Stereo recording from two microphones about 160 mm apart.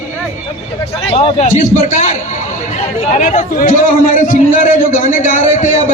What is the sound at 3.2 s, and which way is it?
A man's voice, 50° left (ahead or behind).